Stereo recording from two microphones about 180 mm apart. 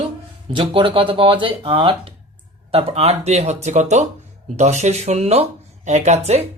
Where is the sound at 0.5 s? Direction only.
25° right (ahead or behind).